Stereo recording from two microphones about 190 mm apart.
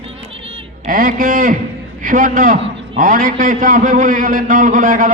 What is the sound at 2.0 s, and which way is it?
A man's voice, 45° right (ahead or behind).